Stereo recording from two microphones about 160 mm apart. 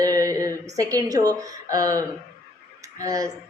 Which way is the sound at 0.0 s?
20° right (ahead or behind).